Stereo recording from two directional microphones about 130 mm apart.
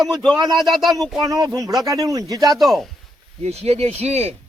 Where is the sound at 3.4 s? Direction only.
55° right (ahead or behind).